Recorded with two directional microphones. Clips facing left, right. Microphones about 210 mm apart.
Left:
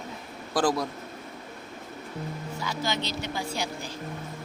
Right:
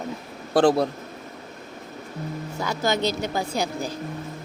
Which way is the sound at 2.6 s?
45° right (ahead or behind).